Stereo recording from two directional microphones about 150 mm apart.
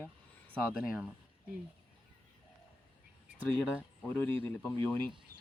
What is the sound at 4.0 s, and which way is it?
Speech, 15° left (ahead or behind).